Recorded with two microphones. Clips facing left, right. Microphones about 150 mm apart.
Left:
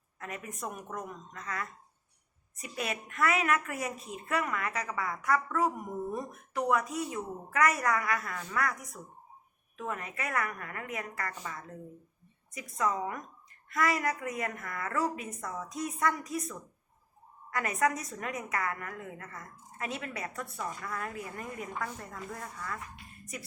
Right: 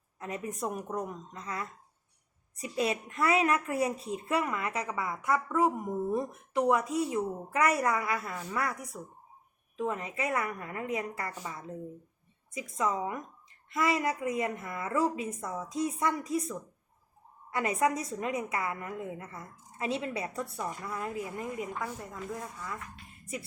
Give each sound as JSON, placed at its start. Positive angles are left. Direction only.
{"t": 0.2, "sound": "a woman's voice", "side_deg": -30}
{"t": 23.2, "sound": "speech", "side_deg": -25}